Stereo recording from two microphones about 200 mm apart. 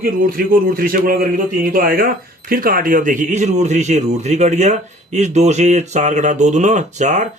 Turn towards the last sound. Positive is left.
turn(degrees=-35)  # may be behind; listen again after turning